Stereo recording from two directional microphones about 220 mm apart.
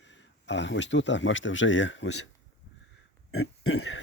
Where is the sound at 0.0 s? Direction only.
55° left (ahead or behind).